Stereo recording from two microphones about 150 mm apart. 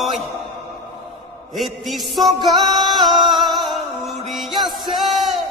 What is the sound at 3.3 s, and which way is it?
Music, centre (ahead or behind).